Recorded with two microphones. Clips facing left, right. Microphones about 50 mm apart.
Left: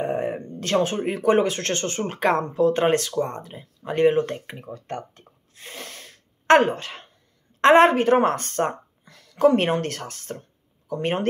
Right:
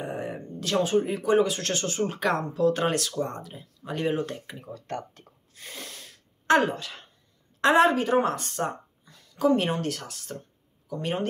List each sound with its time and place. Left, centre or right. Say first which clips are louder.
0.0 s a woman's voice: left 7 dB; left